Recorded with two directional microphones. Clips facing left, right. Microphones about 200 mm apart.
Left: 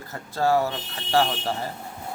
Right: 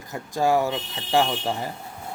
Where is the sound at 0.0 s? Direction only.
15° right (ahead or behind).